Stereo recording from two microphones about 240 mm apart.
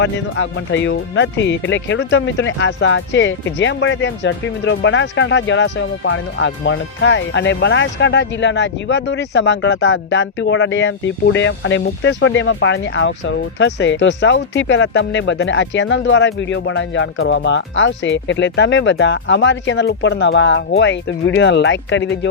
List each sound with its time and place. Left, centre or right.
0.0 s speech: left